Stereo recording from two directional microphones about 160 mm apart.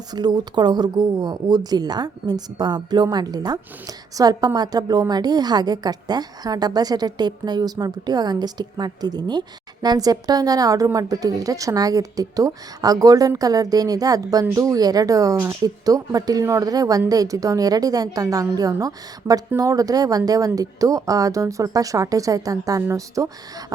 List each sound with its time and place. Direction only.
0.1 s speech: 25° right (ahead or behind)